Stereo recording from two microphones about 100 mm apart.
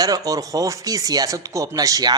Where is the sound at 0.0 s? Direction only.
40° right (ahead or behind).